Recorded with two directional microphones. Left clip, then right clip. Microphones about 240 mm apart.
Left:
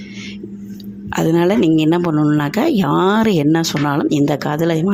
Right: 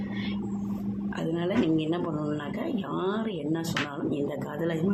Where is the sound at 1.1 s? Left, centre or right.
Left.